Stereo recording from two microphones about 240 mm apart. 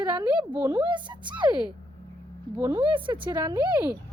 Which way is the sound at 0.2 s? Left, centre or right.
Centre.